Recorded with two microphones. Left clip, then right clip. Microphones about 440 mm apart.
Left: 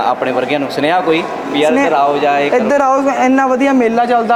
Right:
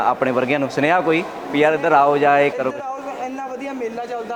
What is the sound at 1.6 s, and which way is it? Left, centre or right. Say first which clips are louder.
Speech: left 3 dB; right.